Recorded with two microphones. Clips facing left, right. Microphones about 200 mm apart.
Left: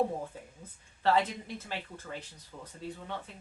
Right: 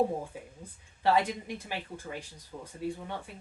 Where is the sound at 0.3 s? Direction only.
10° right (ahead or behind).